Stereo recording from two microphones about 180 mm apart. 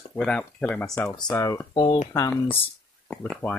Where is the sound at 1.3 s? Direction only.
20° left (ahead or behind).